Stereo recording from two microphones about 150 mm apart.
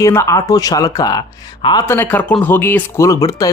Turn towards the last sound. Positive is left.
turn(degrees=25)  # may be behind; listen again after turning